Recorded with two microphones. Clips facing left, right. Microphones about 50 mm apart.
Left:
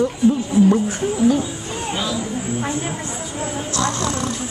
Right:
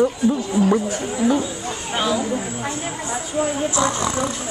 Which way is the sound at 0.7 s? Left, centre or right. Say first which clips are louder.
Left 2 dB; right.